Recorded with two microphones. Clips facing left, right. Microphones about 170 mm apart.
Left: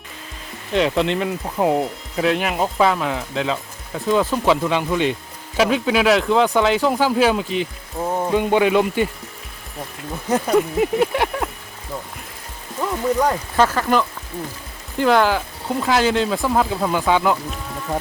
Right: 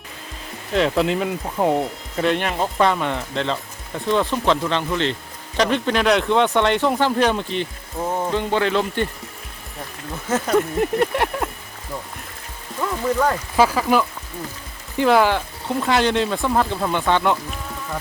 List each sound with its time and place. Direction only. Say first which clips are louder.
0.7 s speech: even; centre (ahead or behind)
10.2 s speech: left 2 dB; 15° left (ahead or behind)
10.5 s speech: left 1 dB; centre (ahead or behind)
12.8 s speech: left 1 dB; 15° left (ahead or behind)
13.6 s speech: right 1 dB; 5° right (ahead or behind)